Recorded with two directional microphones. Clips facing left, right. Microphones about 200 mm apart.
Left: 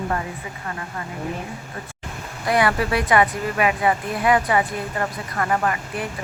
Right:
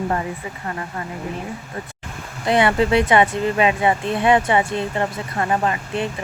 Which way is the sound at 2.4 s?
25° right (ahead or behind).